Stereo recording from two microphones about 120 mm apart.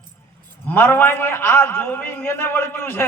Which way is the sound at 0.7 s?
20° left (ahead or behind).